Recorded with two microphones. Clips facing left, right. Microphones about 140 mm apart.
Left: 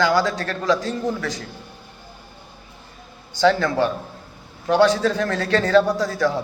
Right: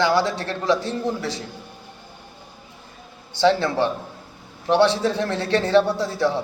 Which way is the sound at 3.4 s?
25° right (ahead or behind).